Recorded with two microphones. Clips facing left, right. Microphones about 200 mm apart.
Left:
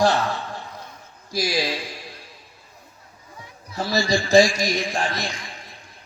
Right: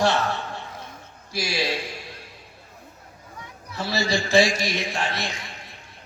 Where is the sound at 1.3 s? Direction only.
40° left (ahead or behind).